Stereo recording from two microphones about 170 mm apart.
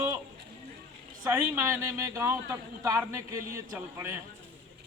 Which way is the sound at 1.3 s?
15° right (ahead or behind).